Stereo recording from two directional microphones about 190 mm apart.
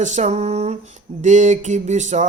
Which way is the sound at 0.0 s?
40° right (ahead or behind).